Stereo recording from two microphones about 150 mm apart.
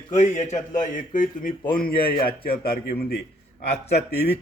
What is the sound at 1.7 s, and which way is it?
A man's voice, 80° left.